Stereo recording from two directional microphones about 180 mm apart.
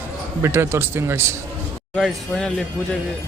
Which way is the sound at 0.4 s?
15° right (ahead or behind).